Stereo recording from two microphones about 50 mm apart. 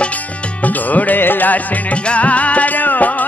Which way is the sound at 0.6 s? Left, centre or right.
Left.